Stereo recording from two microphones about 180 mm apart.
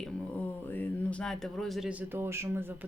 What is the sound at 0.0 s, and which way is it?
Speech, 10° left (ahead or behind).